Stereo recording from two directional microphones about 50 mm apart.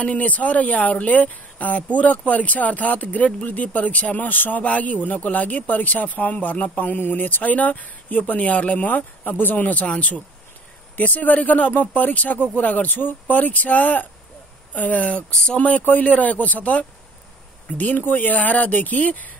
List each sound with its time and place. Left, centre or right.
0.0 s speech: left
9.8 s speech: left
15.3 s speech: centre
15.8 s speech: left